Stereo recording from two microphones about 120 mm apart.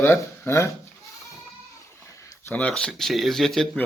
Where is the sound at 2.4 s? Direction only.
10° left (ahead or behind).